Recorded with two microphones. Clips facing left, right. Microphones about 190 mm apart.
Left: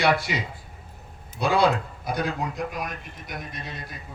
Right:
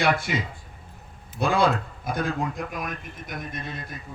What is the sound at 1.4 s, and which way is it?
A man's voice, 50° right (ahead or behind).